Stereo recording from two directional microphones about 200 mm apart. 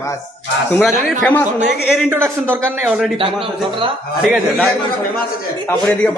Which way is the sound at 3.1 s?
25° right (ahead or behind).